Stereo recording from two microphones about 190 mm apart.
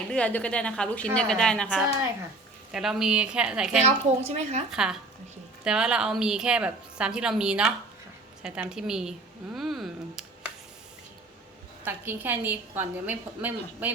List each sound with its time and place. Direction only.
0.1 s a woman's voice: 5° left (ahead or behind)
3.8 s speech: 35° right (ahead or behind)
4.7 s a woman's voice: 5° right (ahead or behind)
9.6 s a sound: centre (ahead or behind)
11.9 s a woman's voice: 10° right (ahead or behind)